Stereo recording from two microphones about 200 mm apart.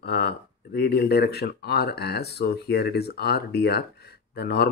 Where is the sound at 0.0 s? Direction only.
55° left (ahead or behind).